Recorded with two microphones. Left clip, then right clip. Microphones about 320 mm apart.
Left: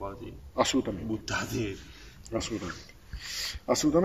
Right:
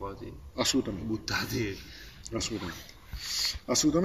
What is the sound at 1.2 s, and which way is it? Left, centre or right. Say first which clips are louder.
Speech: right 2 dB; centre.